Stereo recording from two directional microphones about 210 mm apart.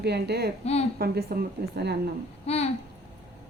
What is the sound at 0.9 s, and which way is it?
Speech, 45° right (ahead or behind).